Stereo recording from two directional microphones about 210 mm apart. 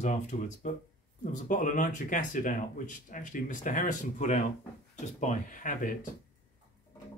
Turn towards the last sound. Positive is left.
turn(degrees=40)  # may be behind; listen again after turning